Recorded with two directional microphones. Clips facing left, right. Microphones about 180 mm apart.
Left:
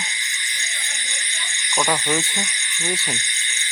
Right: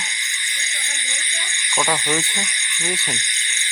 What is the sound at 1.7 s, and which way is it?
Speech, centre (ahead or behind).